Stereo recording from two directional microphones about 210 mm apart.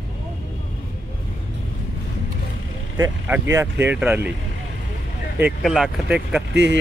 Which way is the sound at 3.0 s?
15° right (ahead or behind).